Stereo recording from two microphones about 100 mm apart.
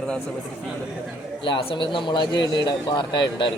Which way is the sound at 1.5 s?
55° left (ahead or behind).